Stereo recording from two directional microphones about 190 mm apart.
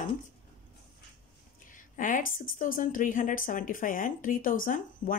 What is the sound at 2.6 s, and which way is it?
Speech, 45° left (ahead or behind).